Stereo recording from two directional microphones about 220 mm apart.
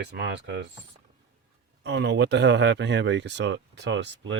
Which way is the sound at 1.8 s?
50° right (ahead or behind).